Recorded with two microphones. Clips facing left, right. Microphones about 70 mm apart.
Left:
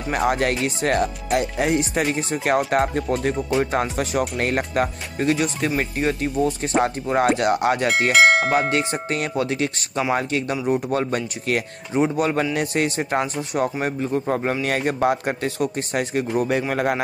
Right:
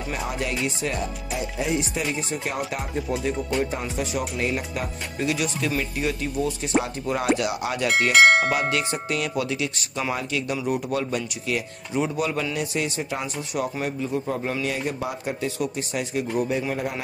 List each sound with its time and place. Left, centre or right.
0.1 s speech: left
8.1 s speech: centre
8.5 s speech: left
11.9 s speech: left
12.5 s speech: left
16.5 s speech: left